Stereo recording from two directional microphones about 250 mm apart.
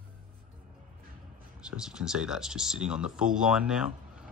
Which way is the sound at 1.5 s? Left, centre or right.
Centre.